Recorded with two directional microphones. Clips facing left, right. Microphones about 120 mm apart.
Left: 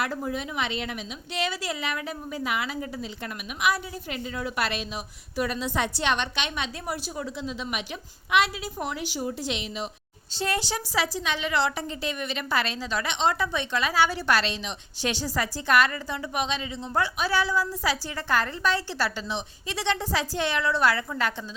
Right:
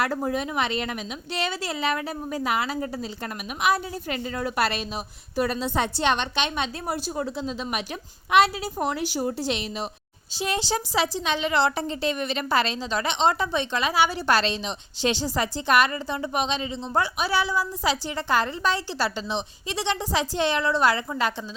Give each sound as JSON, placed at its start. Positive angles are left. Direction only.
{"t": 0.2, "sound": "a woman's voice", "side_deg": -50}
{"t": 1.4, "sound": "a woman's voice", "side_deg": -30}
{"t": 4.1, "sound": "a woman's voice", "side_deg": -45}
{"t": 10.3, "sound": "a woman's voice", "side_deg": -15}
{"t": 14.3, "sound": "a woman's voice", "side_deg": -30}